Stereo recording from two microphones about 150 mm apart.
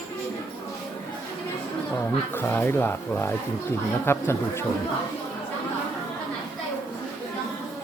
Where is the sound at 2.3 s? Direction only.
15° left (ahead or behind).